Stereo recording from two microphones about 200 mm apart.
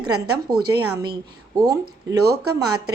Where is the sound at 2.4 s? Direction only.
90° right.